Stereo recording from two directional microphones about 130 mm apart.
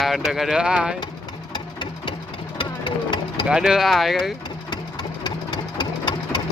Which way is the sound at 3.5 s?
5° right (ahead or behind).